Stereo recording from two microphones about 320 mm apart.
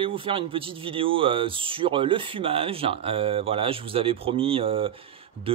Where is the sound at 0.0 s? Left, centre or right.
Centre.